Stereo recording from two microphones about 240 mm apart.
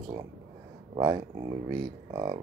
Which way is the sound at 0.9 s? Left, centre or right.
Centre.